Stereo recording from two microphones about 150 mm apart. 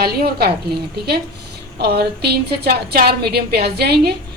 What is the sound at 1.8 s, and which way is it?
A woman's voice, 90° right.